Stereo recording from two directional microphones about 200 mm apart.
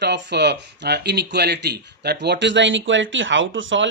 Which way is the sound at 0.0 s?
60° right (ahead or behind).